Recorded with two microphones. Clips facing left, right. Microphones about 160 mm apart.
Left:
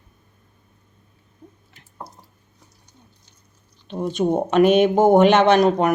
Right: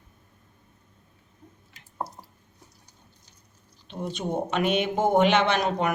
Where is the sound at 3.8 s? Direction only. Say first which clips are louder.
Left 10 dB; 50° left (ahead or behind).